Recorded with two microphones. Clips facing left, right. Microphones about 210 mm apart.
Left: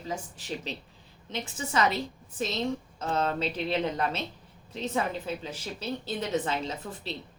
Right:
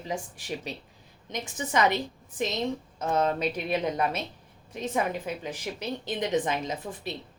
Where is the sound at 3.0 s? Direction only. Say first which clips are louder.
Right 4 dB; 15° right (ahead or behind).